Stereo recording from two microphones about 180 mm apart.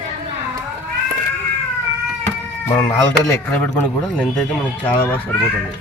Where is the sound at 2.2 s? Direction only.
15° left (ahead or behind).